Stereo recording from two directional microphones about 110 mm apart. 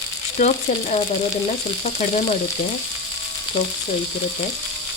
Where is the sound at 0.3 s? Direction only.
90° left.